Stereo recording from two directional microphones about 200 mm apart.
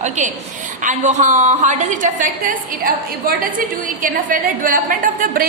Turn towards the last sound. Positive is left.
turn(degrees=-45)  # may be behind; listen again after turning